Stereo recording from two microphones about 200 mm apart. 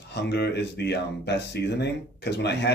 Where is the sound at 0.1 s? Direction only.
55° left (ahead or behind).